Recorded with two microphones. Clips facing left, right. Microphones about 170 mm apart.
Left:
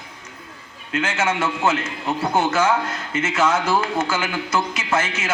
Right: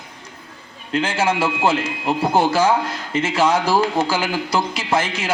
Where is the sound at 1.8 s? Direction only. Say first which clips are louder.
Right 3 dB; 10° right (ahead or behind).